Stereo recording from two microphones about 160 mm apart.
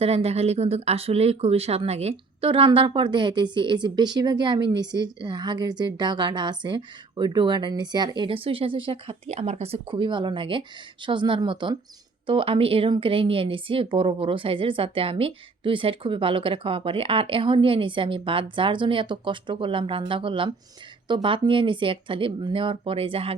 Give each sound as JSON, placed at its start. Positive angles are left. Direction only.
{"t": 0.0, "sound": "speech", "side_deg": -40}